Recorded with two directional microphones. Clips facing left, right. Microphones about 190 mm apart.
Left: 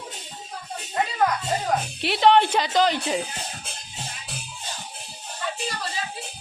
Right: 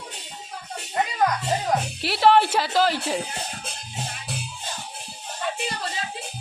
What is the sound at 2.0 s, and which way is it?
Speech, 5° right (ahead or behind).